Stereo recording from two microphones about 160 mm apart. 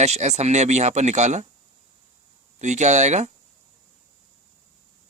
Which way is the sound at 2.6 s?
45° right (ahead or behind).